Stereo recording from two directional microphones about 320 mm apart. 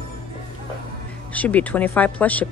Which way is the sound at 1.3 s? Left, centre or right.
Centre.